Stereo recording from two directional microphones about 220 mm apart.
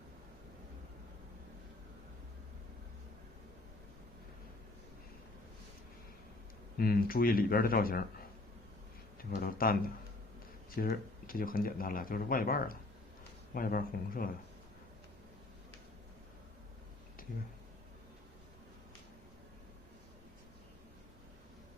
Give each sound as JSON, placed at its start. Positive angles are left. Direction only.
{"t": 6.7, "sound": "speech", "side_deg": 45}
{"t": 9.1, "sound": "speech", "side_deg": 40}